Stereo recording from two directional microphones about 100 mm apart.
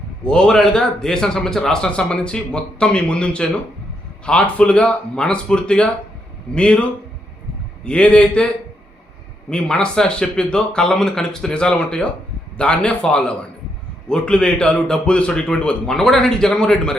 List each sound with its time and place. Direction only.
0.3 s speech: 10° left (ahead or behind)
7.9 s speech: 10° left (ahead or behind)
9.5 s speech: 10° left (ahead or behind)